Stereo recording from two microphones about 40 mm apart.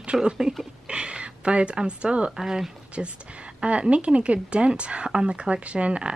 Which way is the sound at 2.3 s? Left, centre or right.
Centre.